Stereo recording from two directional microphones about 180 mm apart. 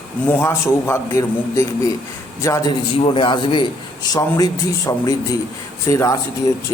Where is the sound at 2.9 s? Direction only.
30° left (ahead or behind).